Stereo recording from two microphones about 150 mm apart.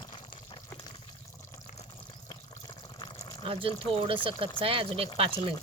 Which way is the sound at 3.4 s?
40° right (ahead or behind).